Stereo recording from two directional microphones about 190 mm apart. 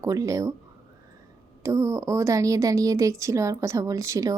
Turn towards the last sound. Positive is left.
turn(degrees=-15)  # may be behind; listen again after turning